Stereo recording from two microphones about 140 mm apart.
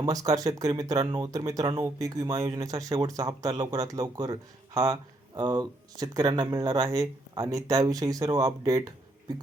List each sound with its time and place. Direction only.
0.0 s speech: 25° right (ahead or behind)